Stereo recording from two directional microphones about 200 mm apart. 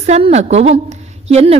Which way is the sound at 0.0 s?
35° right (ahead or behind).